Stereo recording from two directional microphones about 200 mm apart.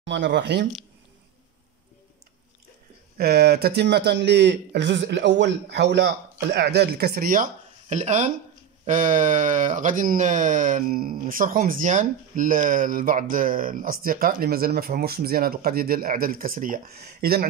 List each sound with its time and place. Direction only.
0.0 s speech: 60° right (ahead or behind)
3.2 s speech: 50° right (ahead or behind)